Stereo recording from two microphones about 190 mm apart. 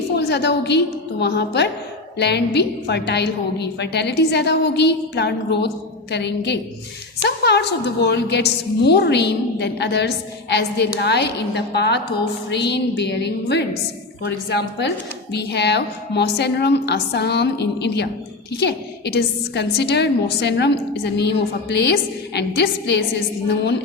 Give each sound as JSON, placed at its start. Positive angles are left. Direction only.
{"t": 0.2, "sound": "a woman's voice", "side_deg": 60}